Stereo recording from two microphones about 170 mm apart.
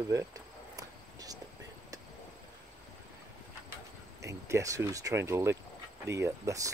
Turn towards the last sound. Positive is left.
turn(degrees=-20)  # may be behind; listen again after turning